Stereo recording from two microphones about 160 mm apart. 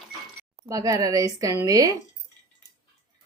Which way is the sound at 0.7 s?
20° right (ahead or behind).